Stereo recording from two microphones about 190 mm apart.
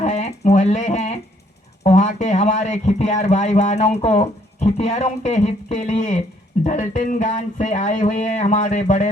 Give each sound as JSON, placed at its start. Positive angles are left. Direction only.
{"t": 0.0, "sound": "a man's voice", "side_deg": 35}